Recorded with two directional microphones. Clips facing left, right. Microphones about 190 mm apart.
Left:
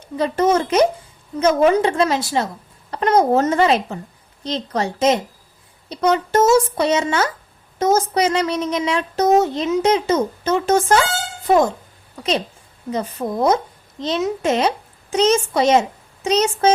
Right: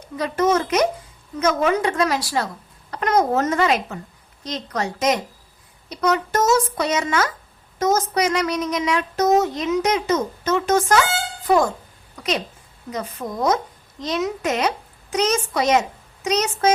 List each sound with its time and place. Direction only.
0.2 s speech: 30° left (ahead or behind)
12.9 s a child's voice: 30° left (ahead or behind)